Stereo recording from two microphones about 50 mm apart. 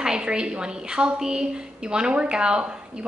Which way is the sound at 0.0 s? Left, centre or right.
Centre.